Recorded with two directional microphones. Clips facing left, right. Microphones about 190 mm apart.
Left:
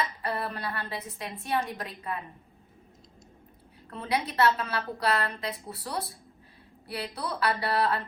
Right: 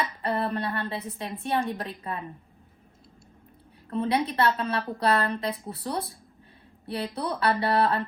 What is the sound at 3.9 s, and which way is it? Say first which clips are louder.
A woman's voice: right 5 dB; 30° right (ahead or behind).